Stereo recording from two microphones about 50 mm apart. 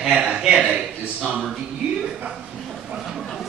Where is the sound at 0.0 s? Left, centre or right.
Centre.